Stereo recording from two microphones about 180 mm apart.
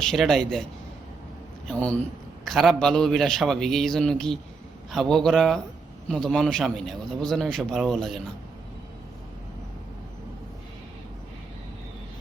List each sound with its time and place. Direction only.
0.0 s a man's voice: centre (ahead or behind)
1.6 s a man's voice: 5° left (ahead or behind)